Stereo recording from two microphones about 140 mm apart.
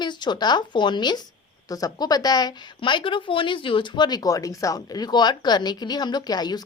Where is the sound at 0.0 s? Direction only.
30° left (ahead or behind).